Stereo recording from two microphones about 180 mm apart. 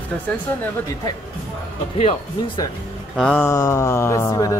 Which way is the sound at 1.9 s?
35° left (ahead or behind).